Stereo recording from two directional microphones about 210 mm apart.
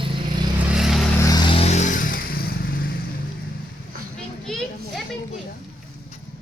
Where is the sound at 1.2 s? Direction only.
20° left (ahead or behind); by 2.9 s 45° left (ahead or behind).